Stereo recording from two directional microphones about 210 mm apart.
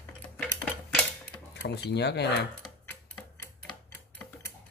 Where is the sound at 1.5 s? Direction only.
55° left (ahead or behind).